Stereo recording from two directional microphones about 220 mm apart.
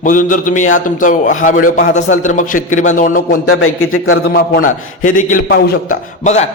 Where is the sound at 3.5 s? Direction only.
70° left (ahead or behind).